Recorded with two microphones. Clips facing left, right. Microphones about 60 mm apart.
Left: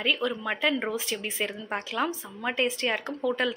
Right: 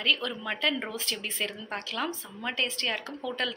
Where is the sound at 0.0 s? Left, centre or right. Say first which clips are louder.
Left 2 dB; centre.